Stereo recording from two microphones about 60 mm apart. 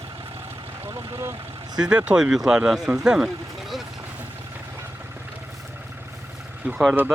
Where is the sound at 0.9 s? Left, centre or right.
Right.